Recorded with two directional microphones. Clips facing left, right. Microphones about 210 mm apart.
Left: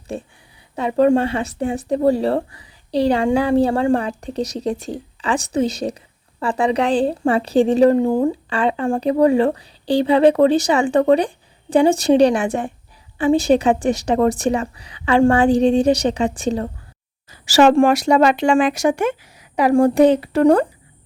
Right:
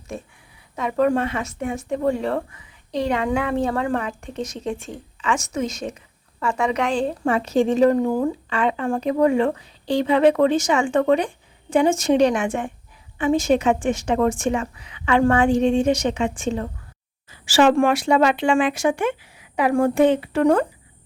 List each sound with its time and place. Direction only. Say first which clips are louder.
0.1 s speech: left 4 dB; 30° left (ahead or behind)